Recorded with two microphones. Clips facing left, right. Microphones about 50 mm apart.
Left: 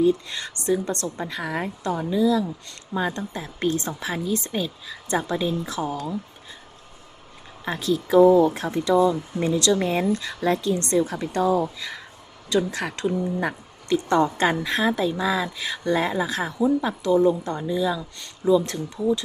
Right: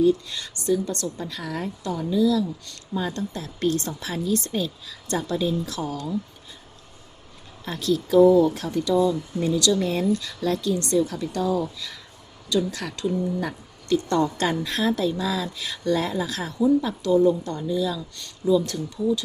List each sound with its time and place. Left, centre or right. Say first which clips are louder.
0.0 s speech: even; left
7.6 s speech: even; left